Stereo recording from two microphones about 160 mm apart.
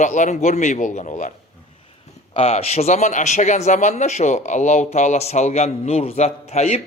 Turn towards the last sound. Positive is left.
turn(degrees=40)  # may be behind; listen again after turning